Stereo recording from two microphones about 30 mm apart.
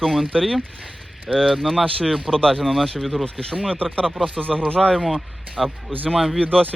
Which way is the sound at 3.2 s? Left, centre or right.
Centre.